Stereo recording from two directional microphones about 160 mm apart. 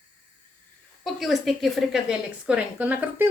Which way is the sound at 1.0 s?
Centre (ahead or behind).